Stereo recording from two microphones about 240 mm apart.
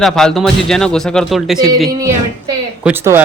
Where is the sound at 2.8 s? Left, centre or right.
Centre.